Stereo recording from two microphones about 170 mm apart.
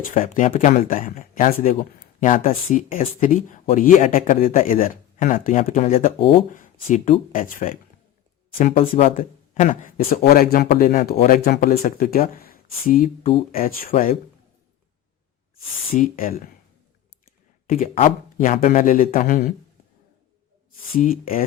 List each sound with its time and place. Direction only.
0.1 s speech: 50° left (ahead or behind); by 6.4 s 35° left (ahead or behind)
6.5 s speech: 50° left (ahead or behind)
8.8 s speech: 40° left (ahead or behind)
10.1 s speech: 60° left (ahead or behind)
16.0 s speech: 55° left (ahead or behind)
17.7 s speech: 45° left (ahead or behind)
20.9 s speech: 55° left (ahead or behind)